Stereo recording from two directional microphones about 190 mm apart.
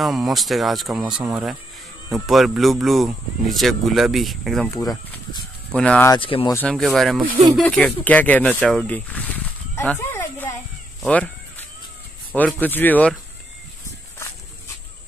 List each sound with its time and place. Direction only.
0.0 s speech: centre (ahead or behind)
5.7 s speech: 5° left (ahead or behind)
6.1 s speech: 25° left (ahead or behind)
6.5 s speech: 5° left (ahead or behind)
11.0 s a sound: 5° left (ahead or behind)
12.4 s speech: 10° left (ahead or behind)